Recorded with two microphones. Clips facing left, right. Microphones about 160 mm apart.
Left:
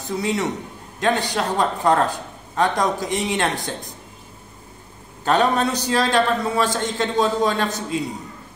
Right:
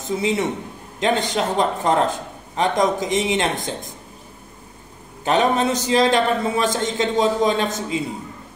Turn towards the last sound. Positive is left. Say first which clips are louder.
# right 2 dB
turn(degrees=-20)  # may be behind; listen again after turning